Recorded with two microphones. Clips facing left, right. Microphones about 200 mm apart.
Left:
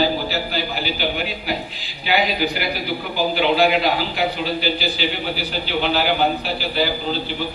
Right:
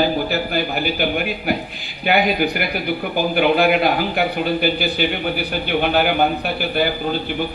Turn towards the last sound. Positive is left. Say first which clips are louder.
# right 3 dB
turn(degrees=-55)  # may be behind; listen again after turning